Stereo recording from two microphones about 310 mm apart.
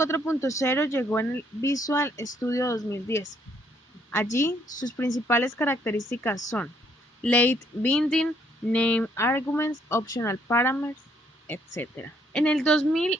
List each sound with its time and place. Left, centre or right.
0.0 s speech: centre